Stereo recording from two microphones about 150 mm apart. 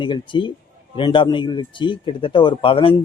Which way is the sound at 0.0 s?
30° left (ahead or behind).